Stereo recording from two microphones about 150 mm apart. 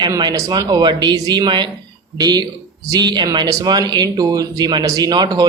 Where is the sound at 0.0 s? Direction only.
30° right (ahead or behind).